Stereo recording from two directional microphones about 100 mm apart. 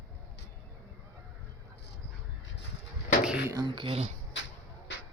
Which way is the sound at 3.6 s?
55° right (ahead or behind).